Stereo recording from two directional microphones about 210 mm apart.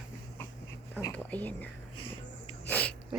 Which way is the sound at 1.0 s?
10° left (ahead or behind).